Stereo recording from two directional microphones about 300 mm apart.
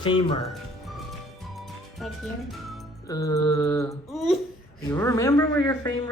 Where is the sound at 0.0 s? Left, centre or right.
Centre.